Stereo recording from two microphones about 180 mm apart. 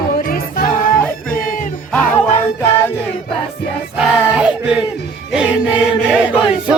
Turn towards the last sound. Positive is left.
turn(degrees=-5)  # may be behind; listen again after turning